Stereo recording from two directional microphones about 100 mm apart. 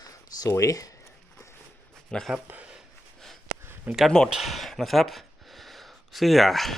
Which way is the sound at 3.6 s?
20° right (ahead or behind).